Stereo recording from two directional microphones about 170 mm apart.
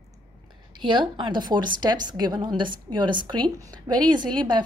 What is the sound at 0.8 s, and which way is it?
A woman's voice, 30° right (ahead or behind).